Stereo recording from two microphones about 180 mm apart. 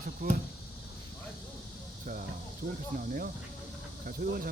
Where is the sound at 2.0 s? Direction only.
50° right (ahead or behind).